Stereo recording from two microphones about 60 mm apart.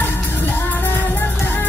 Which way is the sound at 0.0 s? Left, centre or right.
Left.